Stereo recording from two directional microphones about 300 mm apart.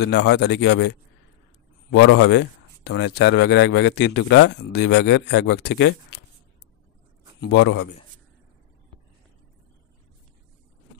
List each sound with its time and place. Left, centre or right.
0.0 s speech: left
7.3 s speech: left